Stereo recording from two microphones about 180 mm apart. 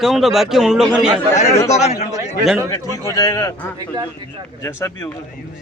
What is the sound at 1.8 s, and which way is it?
Speech, 40° left (ahead or behind).